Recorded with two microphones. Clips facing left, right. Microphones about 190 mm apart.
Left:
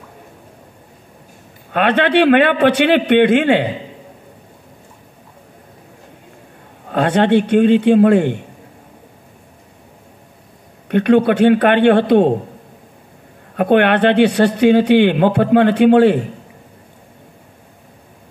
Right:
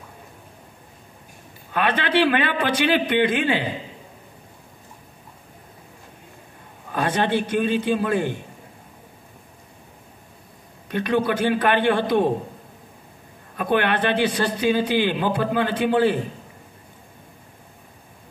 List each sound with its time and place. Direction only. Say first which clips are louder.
1.7 s speech: left 7 dB; 65° left (ahead or behind)
6.9 s speech: left 8 dB; 65° left (ahead or behind)
10.9 s speech: left 9 dB; 65° left (ahead or behind)
13.6 s speech: left 9 dB; 65° left (ahead or behind)